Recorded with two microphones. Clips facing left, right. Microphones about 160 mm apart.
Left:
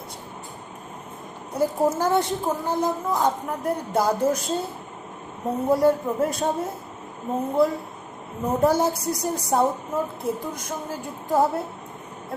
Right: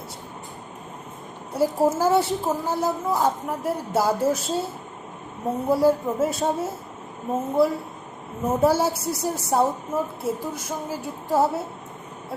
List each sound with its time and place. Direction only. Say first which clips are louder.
1.5 s a woman's voice: right 1 dB; 5° right (ahead or behind)
5.6 s a woman's voice: even; 5° right (ahead or behind)